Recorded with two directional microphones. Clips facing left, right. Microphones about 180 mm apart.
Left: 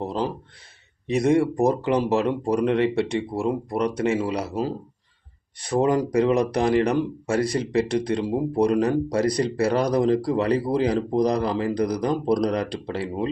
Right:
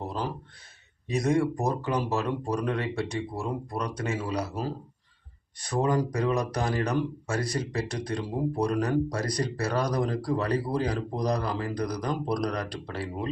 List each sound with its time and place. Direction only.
1.0 s speech: 25° left (ahead or behind)
5.6 s speech: 25° left (ahead or behind)